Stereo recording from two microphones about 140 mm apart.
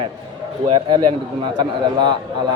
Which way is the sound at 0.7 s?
35° right (ahead or behind).